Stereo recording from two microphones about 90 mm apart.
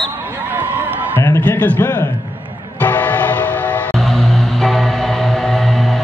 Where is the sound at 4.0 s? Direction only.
5° left (ahead or behind).